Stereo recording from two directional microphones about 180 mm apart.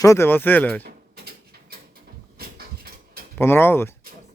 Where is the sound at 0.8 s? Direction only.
60° right (ahead or behind).